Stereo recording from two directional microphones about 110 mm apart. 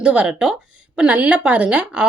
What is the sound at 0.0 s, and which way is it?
A woman's voice, 10° right (ahead or behind).